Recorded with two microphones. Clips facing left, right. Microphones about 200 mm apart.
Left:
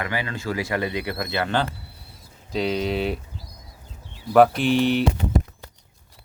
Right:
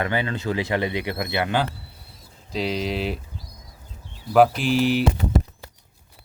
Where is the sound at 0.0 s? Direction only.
25° right (ahead or behind).